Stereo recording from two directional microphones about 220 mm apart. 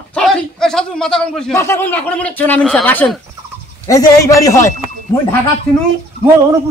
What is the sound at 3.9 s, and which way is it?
Speech, 15° left (ahead or behind).